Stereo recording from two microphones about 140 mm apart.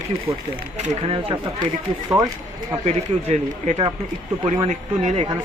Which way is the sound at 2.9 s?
50° right (ahead or behind).